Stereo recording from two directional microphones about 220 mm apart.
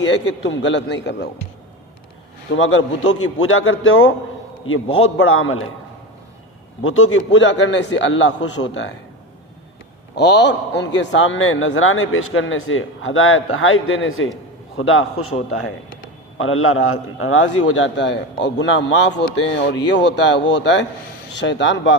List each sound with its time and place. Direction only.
0.0 s a man's voice: 55° left (ahead or behind)
2.5 s a man's voice: 60° left (ahead or behind)
6.8 s a man's voice: 65° left (ahead or behind)
10.2 s a man's voice: 50° left (ahead or behind); by 15.4 s 75° left (ahead or behind)
15.4 s speech: 85° left
16.4 s a man's voice: 70° left (ahead or behind)